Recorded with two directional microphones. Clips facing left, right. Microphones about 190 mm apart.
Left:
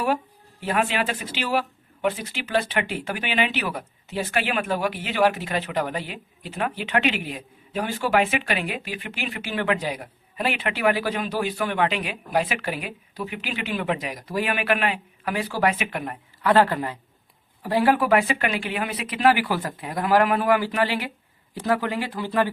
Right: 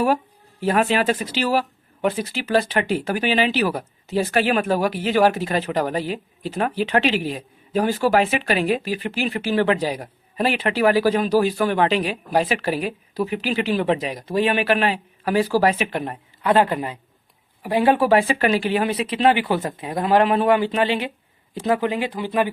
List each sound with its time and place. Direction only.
0.6 s speech: 40° right (ahead or behind); by 22.4 s 15° right (ahead or behind)